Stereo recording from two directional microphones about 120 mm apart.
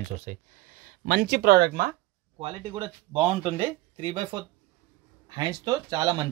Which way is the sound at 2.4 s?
45° right (ahead or behind).